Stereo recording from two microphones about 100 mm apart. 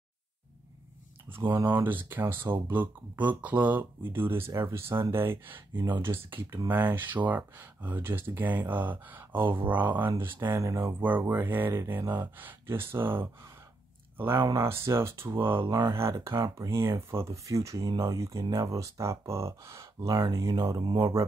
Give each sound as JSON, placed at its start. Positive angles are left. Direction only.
{"t": 1.6, "sound": "speech", "side_deg": -20}
{"t": 15.7, "sound": "speech", "side_deg": -35}
{"t": 20.5, "sound": "speech", "side_deg": -45}